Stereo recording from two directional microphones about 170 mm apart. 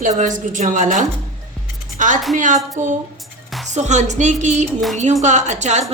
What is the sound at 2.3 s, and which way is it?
A woman's voice, 45° right (ahead or behind).